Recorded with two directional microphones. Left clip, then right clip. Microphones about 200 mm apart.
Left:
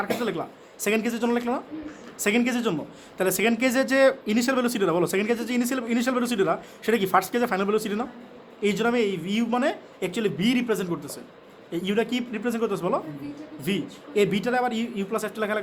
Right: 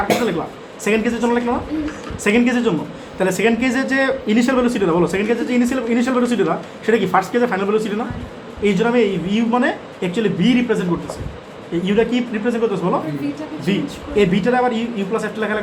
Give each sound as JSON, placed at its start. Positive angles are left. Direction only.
{"t": 0.9, "sound": "a man's voice", "side_deg": 55}
{"t": 11.9, "sound": "a man's voice", "side_deg": 55}